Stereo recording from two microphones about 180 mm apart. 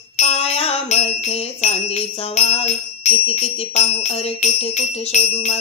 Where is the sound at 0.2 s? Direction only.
35° left (ahead or behind).